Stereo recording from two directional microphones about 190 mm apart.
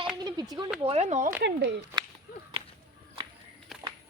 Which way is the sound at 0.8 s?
30° right (ahead or behind).